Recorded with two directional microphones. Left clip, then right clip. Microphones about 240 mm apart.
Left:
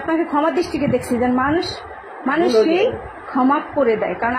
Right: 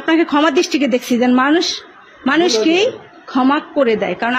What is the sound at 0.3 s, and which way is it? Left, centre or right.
Speech, right.